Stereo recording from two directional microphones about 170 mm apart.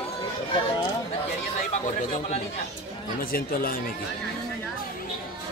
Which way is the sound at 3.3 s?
55° left (ahead or behind).